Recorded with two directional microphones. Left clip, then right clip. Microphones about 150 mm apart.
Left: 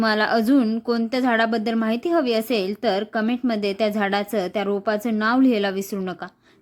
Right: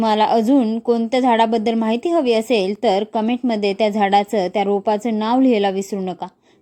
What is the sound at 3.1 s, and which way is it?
Speech, 35° left (ahead or behind).